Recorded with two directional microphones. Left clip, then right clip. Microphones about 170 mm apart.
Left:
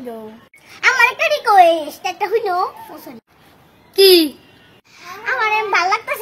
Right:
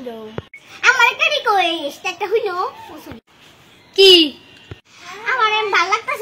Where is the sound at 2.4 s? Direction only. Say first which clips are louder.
Left 3 dB; 10° left (ahead or behind).